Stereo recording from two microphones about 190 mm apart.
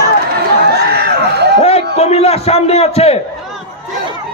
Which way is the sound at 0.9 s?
55° right (ahead or behind).